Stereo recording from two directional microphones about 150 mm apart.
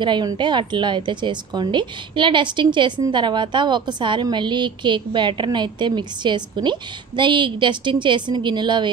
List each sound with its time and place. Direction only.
0.0 s a woman's voice: 30° right (ahead or behind)